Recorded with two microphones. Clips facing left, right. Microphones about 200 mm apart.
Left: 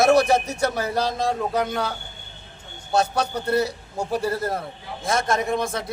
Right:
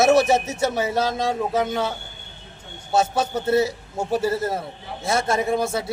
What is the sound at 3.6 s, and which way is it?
Speech, 25° right (ahead or behind).